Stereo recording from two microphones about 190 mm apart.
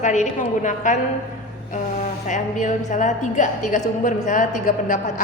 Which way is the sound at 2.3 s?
40° left (ahead or behind).